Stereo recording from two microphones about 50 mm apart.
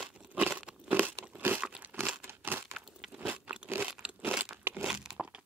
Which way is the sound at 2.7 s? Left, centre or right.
Centre.